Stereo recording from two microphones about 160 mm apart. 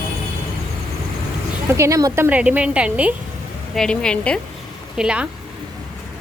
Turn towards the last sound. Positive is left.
turn(degrees=-5)  # may be behind; listen again after turning